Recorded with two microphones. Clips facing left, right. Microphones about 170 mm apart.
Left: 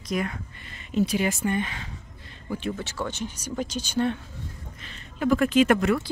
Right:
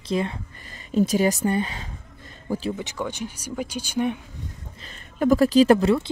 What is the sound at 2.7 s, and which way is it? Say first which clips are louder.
Speech: right 2 dB; 15° right (ahead or behind).